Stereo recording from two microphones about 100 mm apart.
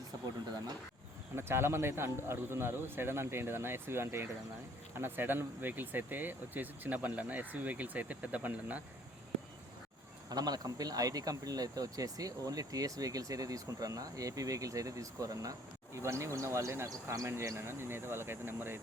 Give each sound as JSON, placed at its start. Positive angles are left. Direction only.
{"t": 1.4, "sound": "speech", "side_deg": -25}
{"t": 10.2, "sound": "speech", "side_deg": -40}